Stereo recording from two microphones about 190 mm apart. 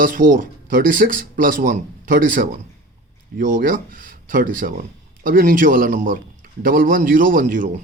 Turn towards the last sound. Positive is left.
turn(degrees=-45)  # may be behind; listen again after turning